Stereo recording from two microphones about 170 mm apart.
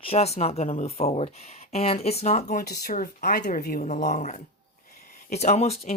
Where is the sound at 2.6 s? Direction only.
65° left (ahead or behind).